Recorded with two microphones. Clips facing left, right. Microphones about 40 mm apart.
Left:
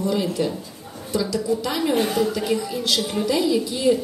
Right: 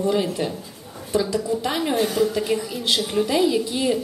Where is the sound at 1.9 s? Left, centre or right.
Left.